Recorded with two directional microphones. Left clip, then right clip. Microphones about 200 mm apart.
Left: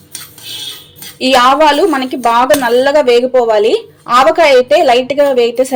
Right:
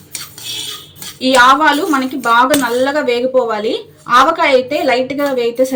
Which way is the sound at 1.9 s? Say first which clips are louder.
Left 1 dB; 40° left (ahead or behind).